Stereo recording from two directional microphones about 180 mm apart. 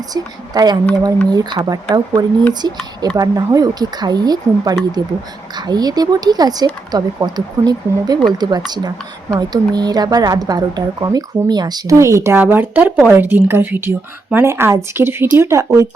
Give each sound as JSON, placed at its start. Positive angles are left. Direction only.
{"t": 0.1, "sound": "a woman's voice", "side_deg": -20}